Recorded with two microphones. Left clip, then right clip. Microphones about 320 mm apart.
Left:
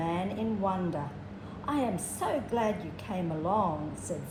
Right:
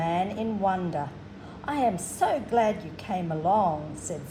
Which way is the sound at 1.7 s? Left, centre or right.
Right.